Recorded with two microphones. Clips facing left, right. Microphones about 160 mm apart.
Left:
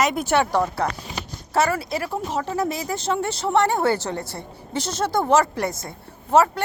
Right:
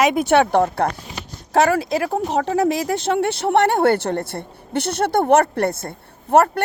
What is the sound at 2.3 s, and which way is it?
A woman's voice, 65° right (ahead or behind).